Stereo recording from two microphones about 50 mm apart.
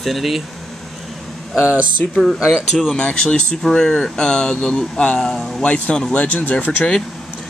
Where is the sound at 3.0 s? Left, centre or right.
Centre.